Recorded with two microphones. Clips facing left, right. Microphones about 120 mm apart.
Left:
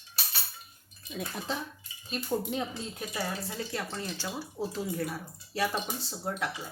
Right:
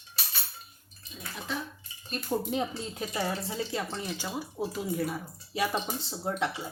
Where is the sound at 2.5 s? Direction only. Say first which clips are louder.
Right 3 dB; 30° right (ahead or behind).